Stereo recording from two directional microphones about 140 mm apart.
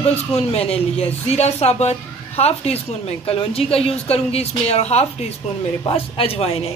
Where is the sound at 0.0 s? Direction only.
45° left (ahead or behind).